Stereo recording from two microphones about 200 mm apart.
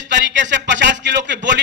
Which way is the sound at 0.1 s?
65° right (ahead or behind).